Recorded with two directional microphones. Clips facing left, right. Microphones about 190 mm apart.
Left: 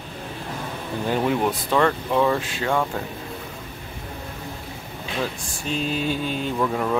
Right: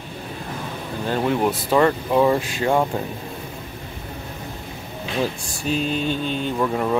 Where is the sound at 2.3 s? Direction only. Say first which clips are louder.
Right 3 dB; 20° right (ahead or behind).